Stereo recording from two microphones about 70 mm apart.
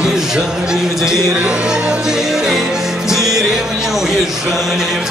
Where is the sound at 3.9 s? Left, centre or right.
Centre.